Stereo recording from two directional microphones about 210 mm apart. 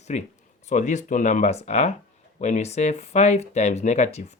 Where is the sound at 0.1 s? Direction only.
35° left (ahead or behind).